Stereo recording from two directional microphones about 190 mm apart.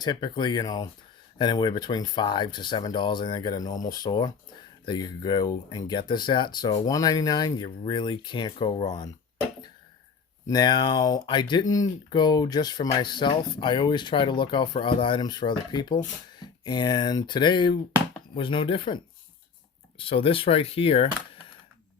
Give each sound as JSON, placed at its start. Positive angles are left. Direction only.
{"t": 0.0, "sound": "speech", "side_deg": 20}
{"t": 10.4, "sound": "speech", "side_deg": 20}